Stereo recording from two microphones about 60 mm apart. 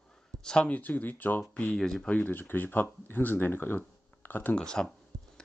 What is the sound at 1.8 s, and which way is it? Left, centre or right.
Speech, centre.